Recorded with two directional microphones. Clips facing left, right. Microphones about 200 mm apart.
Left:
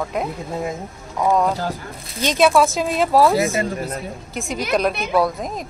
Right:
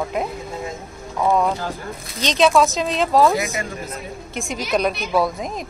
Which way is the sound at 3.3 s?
25° left (ahead or behind).